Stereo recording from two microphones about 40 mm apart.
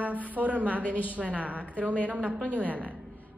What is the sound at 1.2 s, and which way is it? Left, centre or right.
A woman's voice, right.